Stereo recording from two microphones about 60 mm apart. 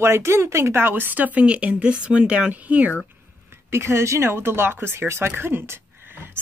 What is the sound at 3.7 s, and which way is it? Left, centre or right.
Speech, right.